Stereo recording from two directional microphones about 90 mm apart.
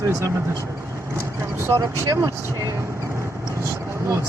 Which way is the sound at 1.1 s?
30° right (ahead or behind).